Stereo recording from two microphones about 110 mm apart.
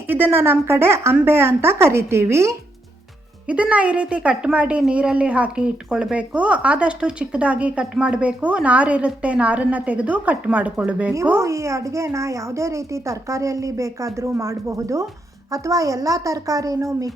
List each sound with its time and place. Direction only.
0.1 s a woman's voice: 20° right (ahead or behind)
3.4 s speech: 10° right (ahead or behind)
11.3 s a woman's voice: 25° right (ahead or behind)